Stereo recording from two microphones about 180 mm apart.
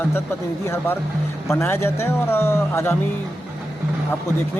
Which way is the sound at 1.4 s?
15° left (ahead or behind).